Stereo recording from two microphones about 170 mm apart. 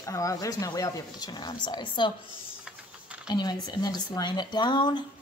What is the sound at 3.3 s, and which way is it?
A woman's voice, 25° left (ahead or behind).